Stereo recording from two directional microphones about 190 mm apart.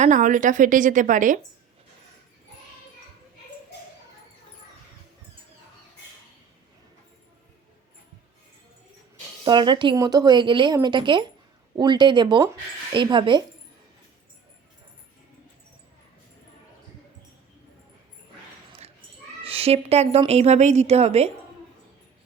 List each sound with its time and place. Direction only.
0.0 s a woman's voice: 40° right (ahead or behind)
9.4 s speech: 25° right (ahead or behind)
19.4 s a woman's voice: 30° right (ahead or behind)